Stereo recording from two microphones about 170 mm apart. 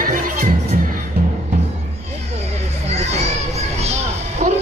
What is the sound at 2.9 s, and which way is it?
Children playing, 40° right (ahead or behind).